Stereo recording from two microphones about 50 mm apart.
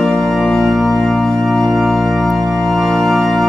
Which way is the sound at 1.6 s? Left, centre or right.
Centre.